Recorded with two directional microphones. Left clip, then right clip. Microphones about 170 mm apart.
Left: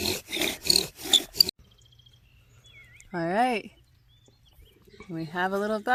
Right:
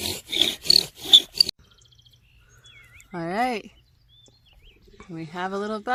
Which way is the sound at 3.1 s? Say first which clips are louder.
Left 1 dB; 20° left (ahead or behind).